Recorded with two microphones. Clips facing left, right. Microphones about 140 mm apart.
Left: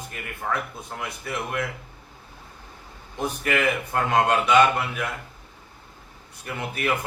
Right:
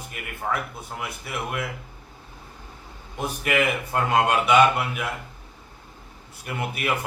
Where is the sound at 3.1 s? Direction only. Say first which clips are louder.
Right 1 dB; 10° right (ahead or behind).